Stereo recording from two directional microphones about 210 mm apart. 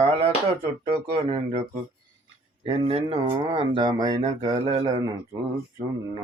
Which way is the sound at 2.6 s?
30° right (ahead or behind).